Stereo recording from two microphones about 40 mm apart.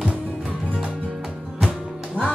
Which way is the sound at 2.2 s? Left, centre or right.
Right.